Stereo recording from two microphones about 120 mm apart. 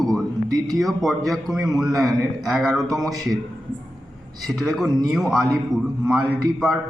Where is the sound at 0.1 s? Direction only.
30° right (ahead or behind).